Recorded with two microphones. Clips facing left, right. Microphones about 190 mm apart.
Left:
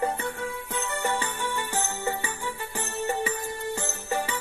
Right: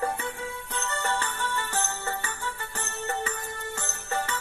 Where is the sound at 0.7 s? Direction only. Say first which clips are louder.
Left 1 dB; 15° left (ahead or behind).